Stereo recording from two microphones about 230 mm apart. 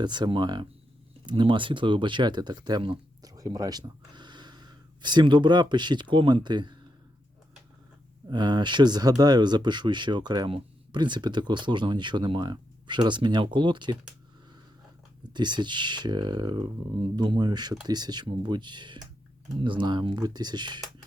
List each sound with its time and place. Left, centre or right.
0.0 s speech: centre
8.3 s speech: centre
15.3 s speech: centre